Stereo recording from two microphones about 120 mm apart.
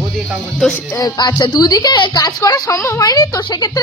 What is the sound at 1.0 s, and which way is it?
Speech, 35° left (ahead or behind).